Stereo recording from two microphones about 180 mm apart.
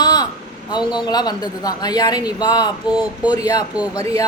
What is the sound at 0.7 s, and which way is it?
A woman's voice, 25° left (ahead or behind).